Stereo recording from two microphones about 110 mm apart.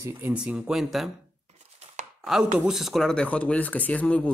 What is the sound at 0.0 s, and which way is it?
Speech, 20° right (ahead or behind).